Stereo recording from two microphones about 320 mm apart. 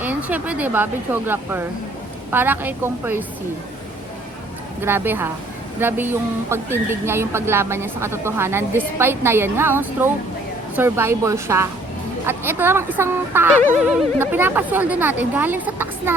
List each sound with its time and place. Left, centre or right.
0.0 s a woman's voice: centre
4.8 s a woman's voice: centre